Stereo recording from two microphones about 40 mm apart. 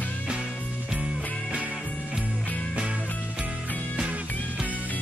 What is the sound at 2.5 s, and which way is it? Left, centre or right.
Music, left.